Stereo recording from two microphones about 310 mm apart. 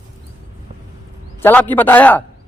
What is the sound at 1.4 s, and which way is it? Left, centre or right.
Speech, centre.